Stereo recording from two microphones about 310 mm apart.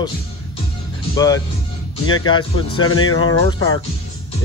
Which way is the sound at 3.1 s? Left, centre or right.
Left.